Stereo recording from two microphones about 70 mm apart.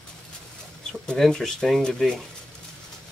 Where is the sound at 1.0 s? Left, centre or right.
Centre.